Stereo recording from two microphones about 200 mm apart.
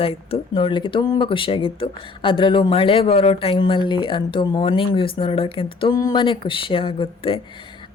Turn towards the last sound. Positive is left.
turn(degrees=25)  # may be behind; listen again after turning